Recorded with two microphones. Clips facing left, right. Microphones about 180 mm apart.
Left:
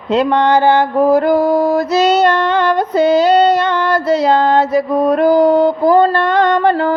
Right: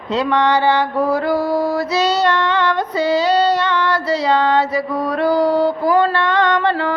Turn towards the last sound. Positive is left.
turn(degrees=45)  # may be behind; listen again after turning